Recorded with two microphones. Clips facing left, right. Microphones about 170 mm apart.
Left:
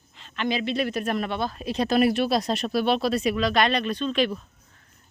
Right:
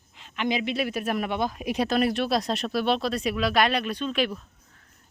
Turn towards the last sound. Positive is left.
turn(degrees=-10)  # may be behind; listen again after turning